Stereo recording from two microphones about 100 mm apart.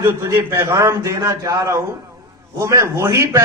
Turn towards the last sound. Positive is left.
turn(degrees=-30)  # may be behind; listen again after turning